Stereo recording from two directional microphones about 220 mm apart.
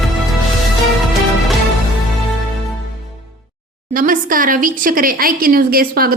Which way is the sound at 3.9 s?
40° right (ahead or behind).